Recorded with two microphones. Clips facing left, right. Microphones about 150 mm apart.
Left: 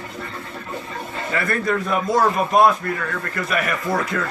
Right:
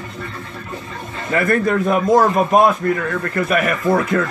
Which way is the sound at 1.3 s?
50° right (ahead or behind).